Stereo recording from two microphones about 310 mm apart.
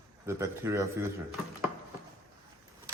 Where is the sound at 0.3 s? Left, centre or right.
Centre.